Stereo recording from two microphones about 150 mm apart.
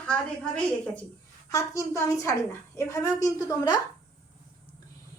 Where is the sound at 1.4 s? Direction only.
20° left (ahead or behind).